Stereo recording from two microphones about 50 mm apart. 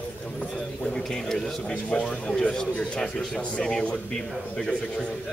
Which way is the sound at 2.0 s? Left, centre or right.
Centre.